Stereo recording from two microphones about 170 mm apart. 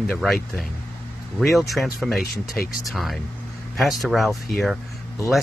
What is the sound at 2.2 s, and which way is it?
Speech, 65° left (ahead or behind).